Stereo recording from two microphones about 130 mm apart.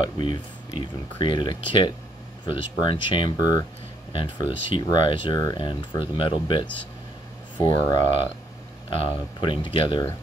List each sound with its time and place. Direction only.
0.0 s speech: 40° left (ahead or behind)